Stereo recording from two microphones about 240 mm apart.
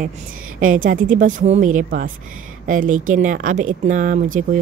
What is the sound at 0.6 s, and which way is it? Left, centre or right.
Speech, right.